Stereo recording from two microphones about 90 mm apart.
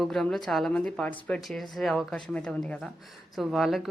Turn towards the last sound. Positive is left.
turn(degrees=0)  # may be behind; listen again after turning